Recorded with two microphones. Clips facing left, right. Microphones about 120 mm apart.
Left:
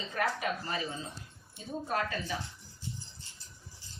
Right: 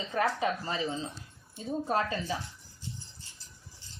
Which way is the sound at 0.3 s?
25° right (ahead or behind).